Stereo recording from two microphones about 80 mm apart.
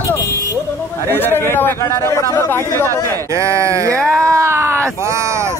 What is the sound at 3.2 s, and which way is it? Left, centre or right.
Speech, right.